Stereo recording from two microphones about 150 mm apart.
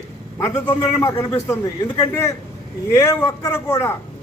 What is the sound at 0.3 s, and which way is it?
A man's voice, 20° left (ahead or behind).